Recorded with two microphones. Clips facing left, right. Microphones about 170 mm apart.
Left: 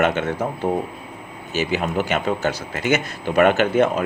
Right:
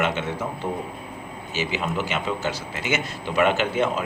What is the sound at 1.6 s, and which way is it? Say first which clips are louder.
Speech: left 4 dB; 50° left (ahead or behind).